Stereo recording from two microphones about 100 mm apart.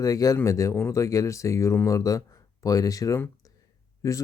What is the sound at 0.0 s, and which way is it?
Speech, 35° left (ahead or behind).